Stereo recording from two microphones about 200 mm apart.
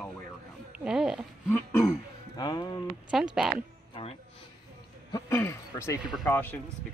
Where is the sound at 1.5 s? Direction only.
15° left (ahead or behind).